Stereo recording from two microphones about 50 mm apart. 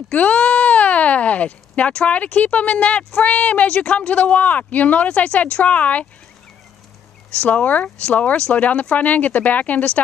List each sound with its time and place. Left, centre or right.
0.1 s speech: left
7.4 s speech: left